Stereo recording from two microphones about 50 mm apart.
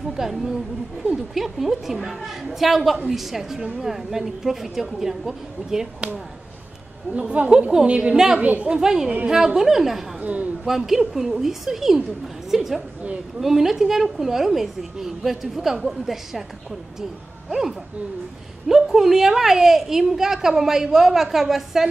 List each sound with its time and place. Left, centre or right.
0.2 s a woman's voice: centre
7.1 s a woman's voice: right
8.6 s a woman's voice: centre
10.2 s a woman's voice: right
10.6 s a woman's voice: centre
17.5 s a woman's voice: centre